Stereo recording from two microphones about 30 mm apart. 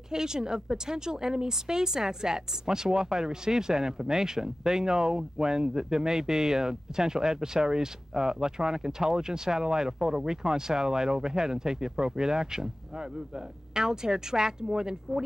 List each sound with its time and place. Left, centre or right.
0.1 s speech: right